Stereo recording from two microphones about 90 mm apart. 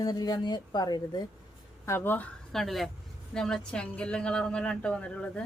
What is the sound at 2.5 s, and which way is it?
A woman's voice, centre (ahead or behind).